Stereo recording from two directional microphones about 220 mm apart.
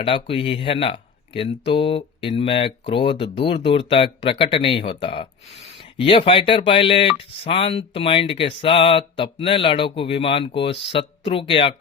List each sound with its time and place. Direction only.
0.0 s speech: 25° left (ahead or behind)